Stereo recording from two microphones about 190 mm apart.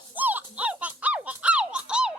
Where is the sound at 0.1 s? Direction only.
10° right (ahead or behind).